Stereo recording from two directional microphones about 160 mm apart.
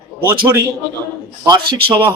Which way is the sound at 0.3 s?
15° right (ahead or behind).